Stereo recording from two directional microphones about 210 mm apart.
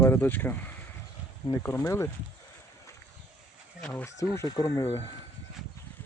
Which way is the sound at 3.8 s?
10° left (ahead or behind).